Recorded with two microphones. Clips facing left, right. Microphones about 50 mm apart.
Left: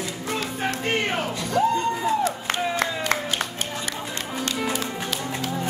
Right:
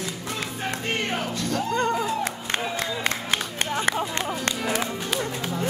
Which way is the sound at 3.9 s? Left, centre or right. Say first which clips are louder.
Right 6 dB; right.